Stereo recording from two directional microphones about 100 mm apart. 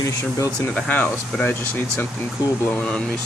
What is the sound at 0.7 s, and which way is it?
Speech, 15° left (ahead or behind).